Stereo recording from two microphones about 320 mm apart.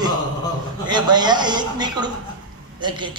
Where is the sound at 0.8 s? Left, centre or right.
Centre.